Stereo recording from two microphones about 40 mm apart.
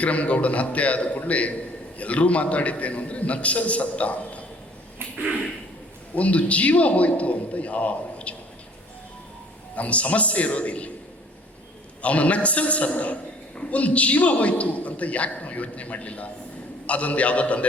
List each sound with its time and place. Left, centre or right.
0.0 s a man's voice: left
6.1 s a man's voice: left
9.7 s a man's voice: left
12.0 s a man's voice: left